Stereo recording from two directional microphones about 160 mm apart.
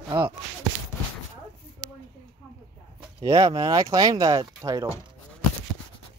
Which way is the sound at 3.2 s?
20° right (ahead or behind).